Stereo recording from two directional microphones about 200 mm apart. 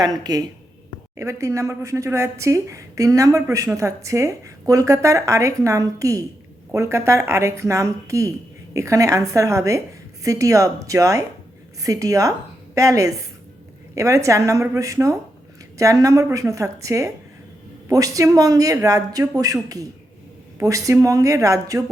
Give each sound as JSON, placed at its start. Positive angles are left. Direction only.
{"t": 0.0, "sound": "speech", "side_deg": -20}